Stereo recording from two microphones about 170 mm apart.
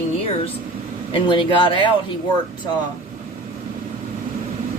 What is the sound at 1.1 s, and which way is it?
Speech, 30° left (ahead or behind).